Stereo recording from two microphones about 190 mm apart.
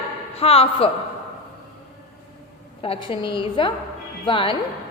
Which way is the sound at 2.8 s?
30° left (ahead or behind).